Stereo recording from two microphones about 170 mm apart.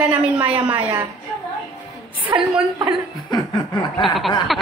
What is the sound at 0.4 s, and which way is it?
Speech, 10° right (ahead or behind).